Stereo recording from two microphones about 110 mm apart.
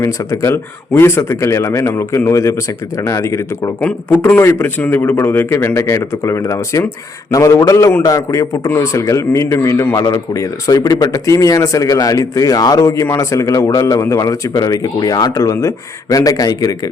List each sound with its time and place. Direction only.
0.0 s speech: 30° left (ahead or behind)
3.8 s speech: 15° left (ahead or behind); by 16.9 s 35° left (ahead or behind)